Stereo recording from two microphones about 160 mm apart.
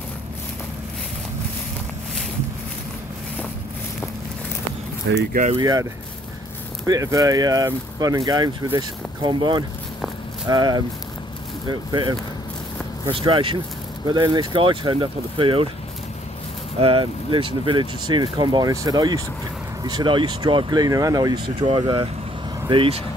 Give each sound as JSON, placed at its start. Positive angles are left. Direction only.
{"t": 5.1, "sound": "speech", "side_deg": -90}
{"t": 5.6, "sound": "speech", "side_deg": -25}
{"t": 6.9, "sound": "speech", "side_deg": -20}
{"t": 16.8, "sound": "speech", "side_deg": -30}